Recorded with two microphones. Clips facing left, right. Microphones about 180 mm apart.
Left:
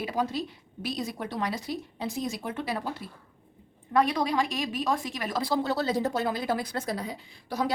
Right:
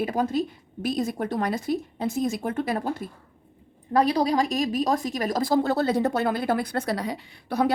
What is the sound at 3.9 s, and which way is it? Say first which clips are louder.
A woman's voice: right 4 dB; 35° right (ahead or behind).